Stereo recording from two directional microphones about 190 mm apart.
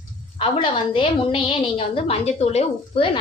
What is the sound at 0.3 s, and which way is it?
A woman's voice, 30° left (ahead or behind).